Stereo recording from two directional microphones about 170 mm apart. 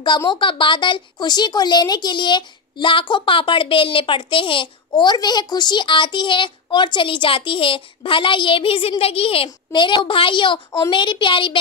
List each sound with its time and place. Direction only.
0.3 s a woman's voice: 30° left (ahead or behind)